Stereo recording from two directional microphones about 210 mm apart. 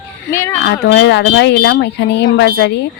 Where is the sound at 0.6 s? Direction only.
50° left (ahead or behind).